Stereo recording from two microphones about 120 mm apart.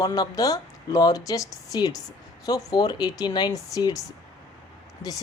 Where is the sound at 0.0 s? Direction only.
30° left (ahead or behind).